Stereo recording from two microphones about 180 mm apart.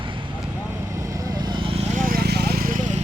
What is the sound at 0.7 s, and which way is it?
Vehicle, 15° right (ahead or behind).